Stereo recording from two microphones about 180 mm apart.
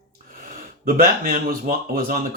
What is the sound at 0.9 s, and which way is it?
Speech, 55° right (ahead or behind).